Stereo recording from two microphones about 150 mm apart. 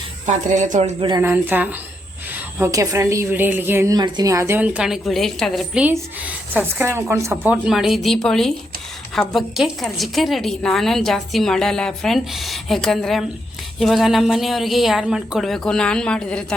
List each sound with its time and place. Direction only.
0.3 s speech: 55° right (ahead or behind)
1.2 s a woman's voice: 15° right (ahead or behind); by 5.8 s centre (ahead or behind)
5.8 s a woman's voice: 10° right (ahead or behind)
7.5 s a woman's voice: 5° right (ahead or behind)